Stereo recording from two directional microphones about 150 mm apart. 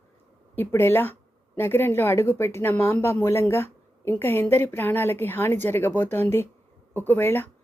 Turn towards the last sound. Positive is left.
turn(degrees=15)  # may be behind; listen again after turning